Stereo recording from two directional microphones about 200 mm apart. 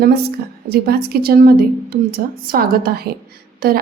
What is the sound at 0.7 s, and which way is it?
A woman's voice, 50° right (ahead or behind).